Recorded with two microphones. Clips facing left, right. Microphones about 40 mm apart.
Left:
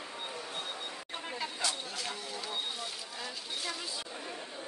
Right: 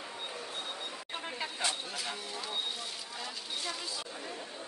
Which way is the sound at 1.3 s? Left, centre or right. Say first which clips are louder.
Even; right.